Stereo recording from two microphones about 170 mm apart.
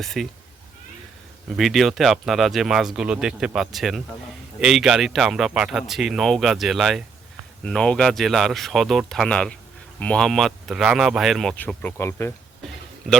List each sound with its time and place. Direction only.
0.0 s speech: centre (ahead or behind)
1.5 s speech: centre (ahead or behind); by 12.3 s 15° left (ahead or behind)